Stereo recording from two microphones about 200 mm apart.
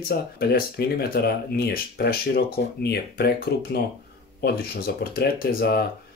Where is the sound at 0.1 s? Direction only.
55° left (ahead or behind).